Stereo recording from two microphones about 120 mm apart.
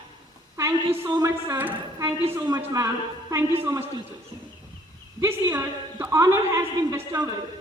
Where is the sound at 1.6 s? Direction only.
15° right (ahead or behind).